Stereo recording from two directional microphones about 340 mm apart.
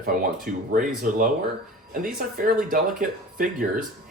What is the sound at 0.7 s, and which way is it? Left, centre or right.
Speech, right.